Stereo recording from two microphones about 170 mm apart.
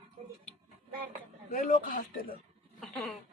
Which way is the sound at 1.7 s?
55° left (ahead or behind).